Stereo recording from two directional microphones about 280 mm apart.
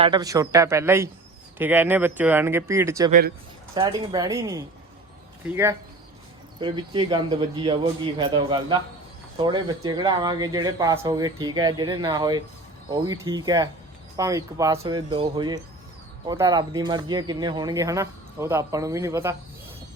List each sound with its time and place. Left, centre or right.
0.0 s speech: centre
3.1 s speech: right
3.8 s speech: centre
6.6 s speech: centre